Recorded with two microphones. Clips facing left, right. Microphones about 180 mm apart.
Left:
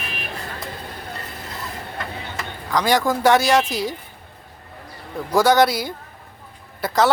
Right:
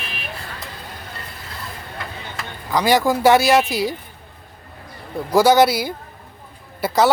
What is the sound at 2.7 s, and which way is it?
A man's voice, 5° right (ahead or behind).